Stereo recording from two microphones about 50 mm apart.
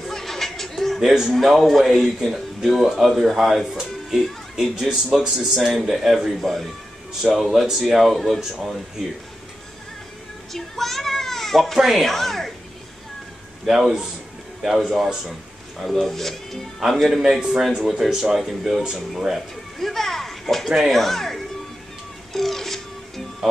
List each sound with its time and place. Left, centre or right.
0.1 s a sound: centre
1.3 s a man's voice: centre
7.2 s a man's voice: centre
10.5 s a sound: centre
13.7 s a man's voice: centre
15.8 s a man's voice: centre
19.9 s speech: centre
22.3 s music: centre